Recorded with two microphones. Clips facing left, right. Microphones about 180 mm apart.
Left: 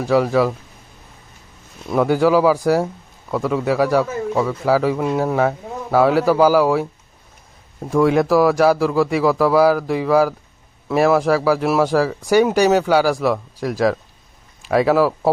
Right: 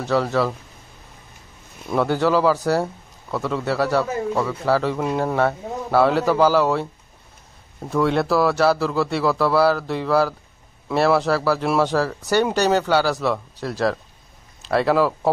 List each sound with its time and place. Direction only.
0.0 s speech: 10° left (ahead or behind)
1.9 s speech: 10° left (ahead or behind)
7.9 s speech: 10° left (ahead or behind)